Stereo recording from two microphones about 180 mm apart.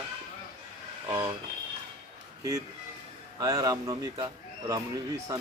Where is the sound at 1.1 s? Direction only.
20° right (ahead or behind).